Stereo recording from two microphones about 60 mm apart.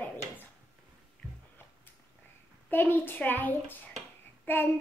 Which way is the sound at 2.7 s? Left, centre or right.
Left.